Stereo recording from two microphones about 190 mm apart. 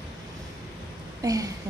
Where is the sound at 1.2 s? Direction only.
15° right (ahead or behind).